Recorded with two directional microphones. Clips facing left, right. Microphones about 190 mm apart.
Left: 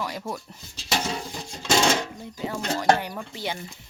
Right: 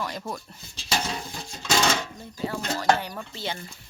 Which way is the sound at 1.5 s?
20° left (ahead or behind).